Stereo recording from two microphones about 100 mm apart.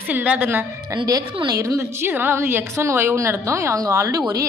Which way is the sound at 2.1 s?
20° right (ahead or behind).